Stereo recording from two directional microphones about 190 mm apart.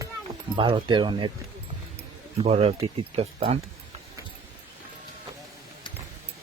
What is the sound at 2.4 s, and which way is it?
Speech, 30° right (ahead or behind).